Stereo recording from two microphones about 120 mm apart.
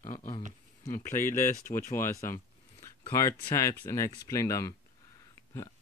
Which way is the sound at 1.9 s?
25° left (ahead or behind).